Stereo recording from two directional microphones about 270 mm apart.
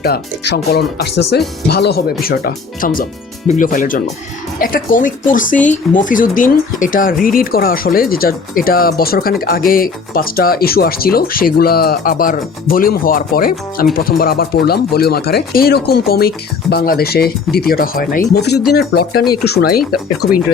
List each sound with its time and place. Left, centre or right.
0.0 s speech: left